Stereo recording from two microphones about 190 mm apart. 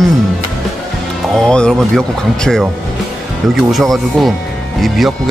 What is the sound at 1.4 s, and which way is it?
Speech, 5° left (ahead or behind).